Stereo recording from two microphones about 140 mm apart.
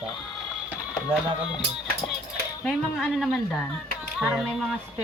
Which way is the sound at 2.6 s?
Centre (ahead or behind).